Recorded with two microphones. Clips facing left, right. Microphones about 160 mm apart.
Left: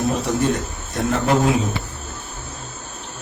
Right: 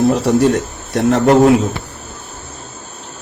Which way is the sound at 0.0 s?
75° right (ahead or behind).